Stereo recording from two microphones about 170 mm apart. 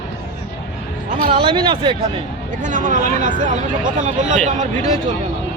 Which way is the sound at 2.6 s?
50° right (ahead or behind).